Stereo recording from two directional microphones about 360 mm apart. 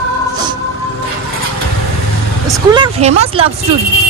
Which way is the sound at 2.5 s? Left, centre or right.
Centre.